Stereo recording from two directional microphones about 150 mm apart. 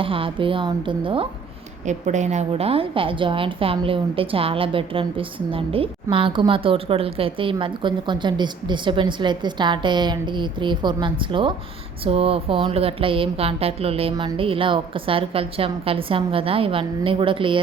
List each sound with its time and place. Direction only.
0.0 s speech: 35° right (ahead or behind)
1.9 s speech: 50° right (ahead or behind); by 17.6 s 35° right (ahead or behind)